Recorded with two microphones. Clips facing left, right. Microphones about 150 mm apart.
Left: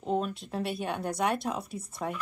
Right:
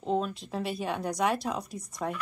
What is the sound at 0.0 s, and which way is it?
Speech, 5° left (ahead or behind).